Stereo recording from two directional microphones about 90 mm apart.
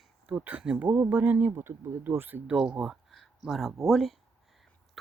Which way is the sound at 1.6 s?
30° right (ahead or behind).